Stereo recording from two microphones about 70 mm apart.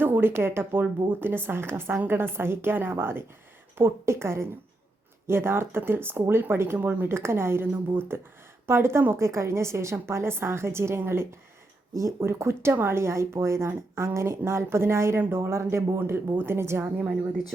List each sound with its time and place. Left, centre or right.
0.0 s speech: right